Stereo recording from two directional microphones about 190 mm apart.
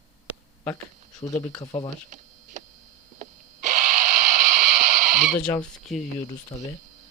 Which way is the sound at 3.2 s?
40° right (ahead or behind).